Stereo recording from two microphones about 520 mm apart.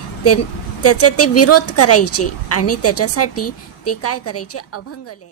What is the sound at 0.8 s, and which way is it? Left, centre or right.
A woman's voice, left.